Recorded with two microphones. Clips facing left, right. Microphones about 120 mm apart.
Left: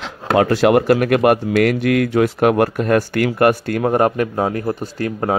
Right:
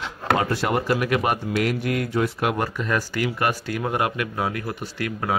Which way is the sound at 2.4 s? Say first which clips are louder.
Left 9 dB; 60° left (ahead or behind).